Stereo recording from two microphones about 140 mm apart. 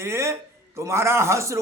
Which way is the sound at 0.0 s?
20° right (ahead or behind).